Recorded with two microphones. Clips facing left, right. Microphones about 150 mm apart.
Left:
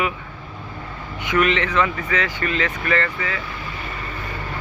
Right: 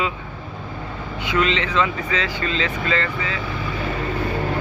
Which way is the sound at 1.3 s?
20° right (ahead or behind).